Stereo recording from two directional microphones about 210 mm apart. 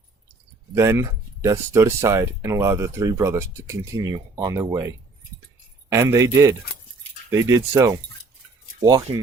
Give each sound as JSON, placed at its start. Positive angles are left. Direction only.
{"t": 0.7, "sound": "speech", "side_deg": -15}
{"t": 5.9, "sound": "speech", "side_deg": -15}
{"t": 7.3, "sound": "speech", "side_deg": -15}